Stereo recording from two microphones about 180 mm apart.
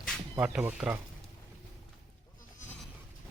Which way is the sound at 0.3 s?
5° right (ahead or behind).